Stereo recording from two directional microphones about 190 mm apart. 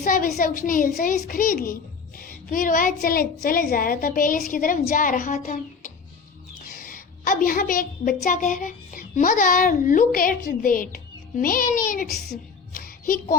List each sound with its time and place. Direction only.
0.0 s a woman's voice: 45° left (ahead or behind)